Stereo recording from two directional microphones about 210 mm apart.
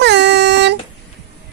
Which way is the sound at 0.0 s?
55° right (ahead or behind).